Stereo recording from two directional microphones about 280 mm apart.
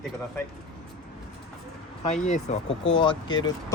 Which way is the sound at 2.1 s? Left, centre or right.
Left.